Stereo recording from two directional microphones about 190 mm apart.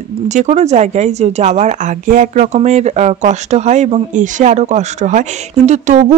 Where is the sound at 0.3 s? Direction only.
40° right (ahead or behind).